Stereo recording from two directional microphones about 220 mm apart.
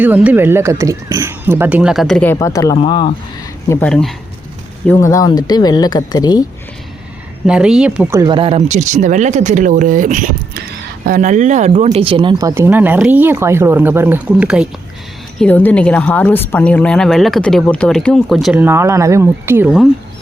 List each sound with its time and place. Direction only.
0.0 s speech: 5° right (ahead or behind); by 3.1 s 20° left (ahead or behind)
3.7 s a woman's voice: 5° left (ahead or behind)
4.9 s speech: 15° left (ahead or behind)
7.4 s speech: 5° right (ahead or behind)
15.4 s a woman's voice: 5° left (ahead or behind)